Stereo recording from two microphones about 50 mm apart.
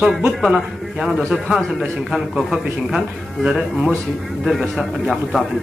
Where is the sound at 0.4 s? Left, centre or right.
Centre.